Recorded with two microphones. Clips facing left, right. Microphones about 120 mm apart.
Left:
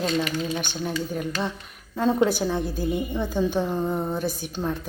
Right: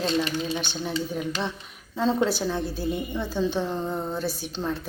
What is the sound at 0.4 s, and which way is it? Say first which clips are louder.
Speech: left 1 dB; 15° left (ahead or behind).